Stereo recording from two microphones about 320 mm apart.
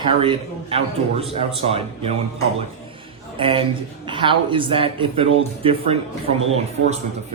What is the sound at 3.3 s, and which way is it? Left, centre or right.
A man's voice, centre.